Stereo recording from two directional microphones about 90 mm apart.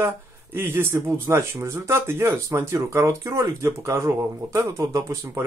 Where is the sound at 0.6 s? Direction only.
25° right (ahead or behind).